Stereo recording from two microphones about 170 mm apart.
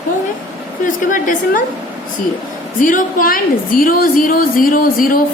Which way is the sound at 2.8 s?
50° left (ahead or behind).